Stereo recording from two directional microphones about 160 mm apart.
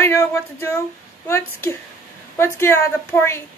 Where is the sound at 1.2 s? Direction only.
15° left (ahead or behind).